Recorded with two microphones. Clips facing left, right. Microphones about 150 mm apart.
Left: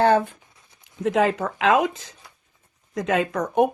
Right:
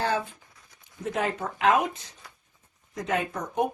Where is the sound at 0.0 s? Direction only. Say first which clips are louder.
Left 10 dB; 55° left (ahead or behind).